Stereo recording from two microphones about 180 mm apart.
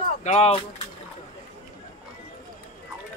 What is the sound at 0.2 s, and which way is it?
Speech, 35° left (ahead or behind).